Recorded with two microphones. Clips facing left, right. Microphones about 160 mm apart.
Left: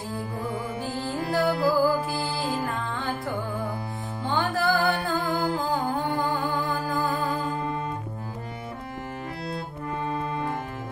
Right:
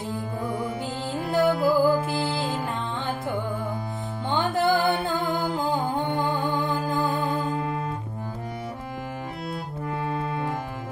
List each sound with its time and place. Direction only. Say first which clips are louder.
1.3 s music: right 2 dB; 20° right (ahead or behind)
4.3 s music: right 2 dB; 20° right (ahead or behind)
7.3 s music: right 2 dB; 5° right (ahead or behind)
9.8 s organ: right 1 dB; 10° right (ahead or behind)